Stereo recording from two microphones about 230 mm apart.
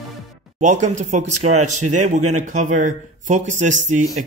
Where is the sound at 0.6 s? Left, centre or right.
Right.